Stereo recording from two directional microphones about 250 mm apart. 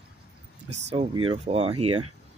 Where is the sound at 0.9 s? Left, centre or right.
Centre.